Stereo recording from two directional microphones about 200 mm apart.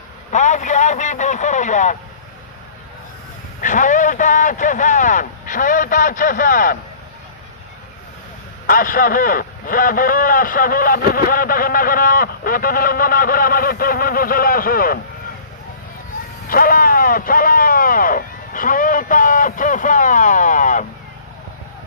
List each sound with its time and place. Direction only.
0.3 s speech: 35° left (ahead or behind)
3.6 s speech: 40° left (ahead or behind)
8.6 s a man's voice: 45° left (ahead or behind)
16.5 s a sound: 45° left (ahead or behind)